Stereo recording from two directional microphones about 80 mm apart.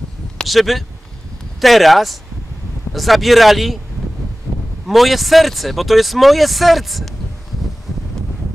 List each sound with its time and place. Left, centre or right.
0.4 s speech: centre
4.5 s a sound: right
4.8 s speech: centre